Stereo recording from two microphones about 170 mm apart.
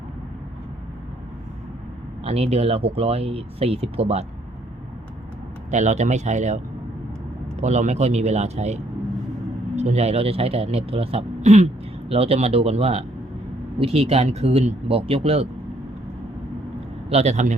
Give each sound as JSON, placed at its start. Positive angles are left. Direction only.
{"t": 2.2, "sound": "speech", "side_deg": -40}
{"t": 5.7, "sound": "speech", "side_deg": -45}
{"t": 7.6, "sound": "speech", "side_deg": -40}
{"t": 17.1, "sound": "speech", "side_deg": -40}